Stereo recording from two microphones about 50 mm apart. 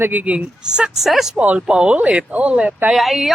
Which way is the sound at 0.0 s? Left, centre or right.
Right.